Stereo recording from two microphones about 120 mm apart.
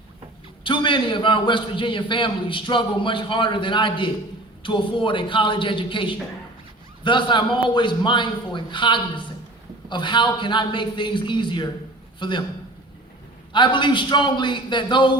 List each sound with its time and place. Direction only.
0.6 s a man's voice: 45° left (ahead or behind)
13.5 s a man's voice: 40° left (ahead or behind)